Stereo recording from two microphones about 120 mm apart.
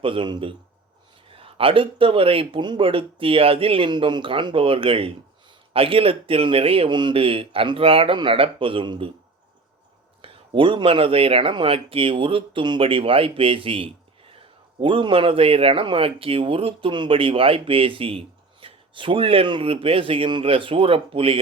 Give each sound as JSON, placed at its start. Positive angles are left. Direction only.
{"t": 0.0, "sound": "speech", "side_deg": -45}
{"t": 10.2, "sound": "speech", "side_deg": -45}